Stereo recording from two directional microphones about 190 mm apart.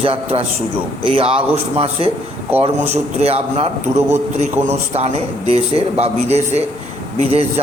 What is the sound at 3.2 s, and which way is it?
Speech, 30° right (ahead or behind).